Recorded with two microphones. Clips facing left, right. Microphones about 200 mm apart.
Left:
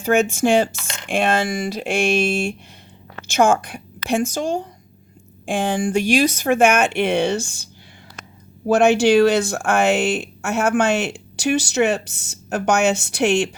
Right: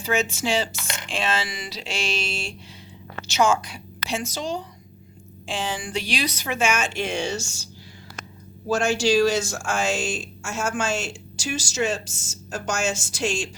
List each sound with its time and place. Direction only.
0.0 s a woman's voice: 55° left (ahead or behind)